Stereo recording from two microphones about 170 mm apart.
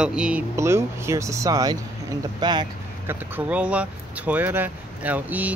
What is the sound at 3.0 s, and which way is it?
Speech, 10° right (ahead or behind).